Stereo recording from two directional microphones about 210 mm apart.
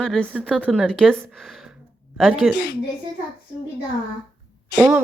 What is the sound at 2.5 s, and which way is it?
Speech, 50° left (ahead or behind).